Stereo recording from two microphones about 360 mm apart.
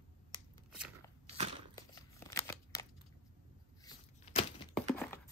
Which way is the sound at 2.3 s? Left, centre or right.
Centre.